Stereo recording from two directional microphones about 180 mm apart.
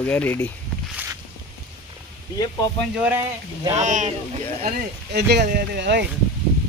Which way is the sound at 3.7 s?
40° right (ahead or behind).